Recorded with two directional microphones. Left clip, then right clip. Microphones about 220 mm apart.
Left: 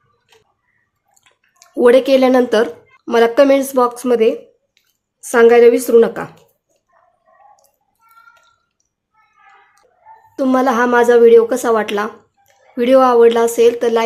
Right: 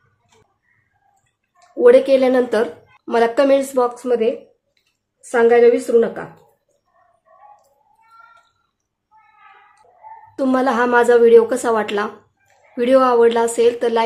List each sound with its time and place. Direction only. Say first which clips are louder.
1.8 s a woman's voice: left 1 dB; 25° left (ahead or behind)
10.3 s speech: left 3 dB; 10° left (ahead or behind)